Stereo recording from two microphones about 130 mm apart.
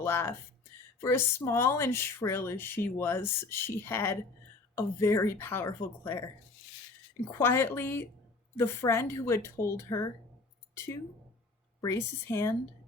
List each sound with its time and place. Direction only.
0.0 s speech: 20° left (ahead or behind)
7.3 s speech: 20° left (ahead or behind)
11.8 s speech: 20° left (ahead or behind)